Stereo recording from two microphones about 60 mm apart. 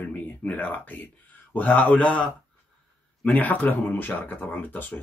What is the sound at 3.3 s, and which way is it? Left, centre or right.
Speech, left.